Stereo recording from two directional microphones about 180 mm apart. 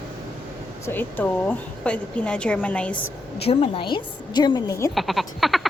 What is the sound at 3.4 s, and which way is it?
A woman's voice, 35° left (ahead or behind).